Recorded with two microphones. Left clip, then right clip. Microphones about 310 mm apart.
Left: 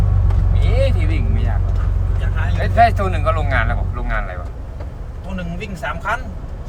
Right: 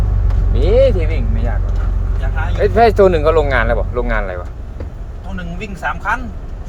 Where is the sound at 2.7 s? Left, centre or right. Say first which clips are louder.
Right 4 dB; centre.